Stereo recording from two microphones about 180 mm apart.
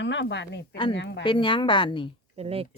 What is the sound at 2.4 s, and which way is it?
Speech, 35° right (ahead or behind).